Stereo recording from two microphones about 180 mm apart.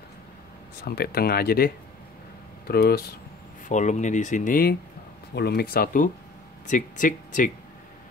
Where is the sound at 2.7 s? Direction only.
60° left (ahead or behind).